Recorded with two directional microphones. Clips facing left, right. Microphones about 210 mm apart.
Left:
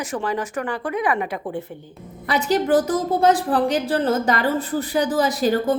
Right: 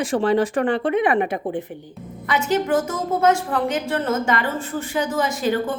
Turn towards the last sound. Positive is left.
turn(degrees=40)  # may be behind; listen again after turning